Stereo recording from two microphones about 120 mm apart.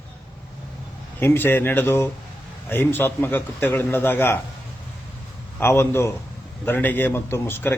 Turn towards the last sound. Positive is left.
turn(degrees=20)  # may be behind; listen again after turning